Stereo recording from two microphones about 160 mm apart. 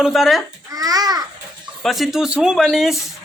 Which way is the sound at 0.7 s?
25° right (ahead or behind).